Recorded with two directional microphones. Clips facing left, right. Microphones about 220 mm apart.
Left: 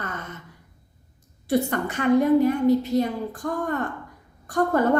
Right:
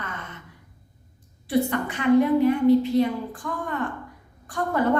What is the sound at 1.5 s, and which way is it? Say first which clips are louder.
A woman's voice: even; 45° left (ahead or behind).